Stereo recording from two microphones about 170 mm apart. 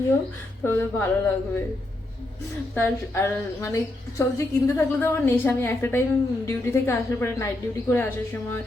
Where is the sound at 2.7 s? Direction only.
15° left (ahead or behind).